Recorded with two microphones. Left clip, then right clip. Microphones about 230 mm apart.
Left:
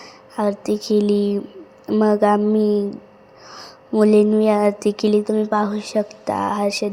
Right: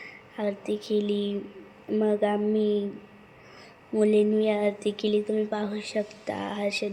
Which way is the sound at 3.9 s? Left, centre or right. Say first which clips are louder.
Left 8 dB; left.